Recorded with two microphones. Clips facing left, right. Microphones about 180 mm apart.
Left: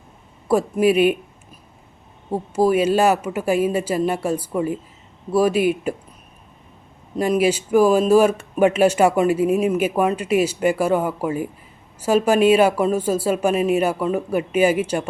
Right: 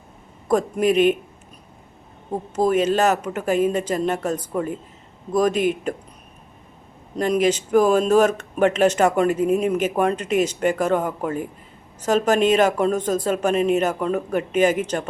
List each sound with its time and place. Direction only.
0.4 s speech: 10° left (ahead or behind)
2.3 s speech: 10° left (ahead or behind)
7.2 s speech: 10° left (ahead or behind)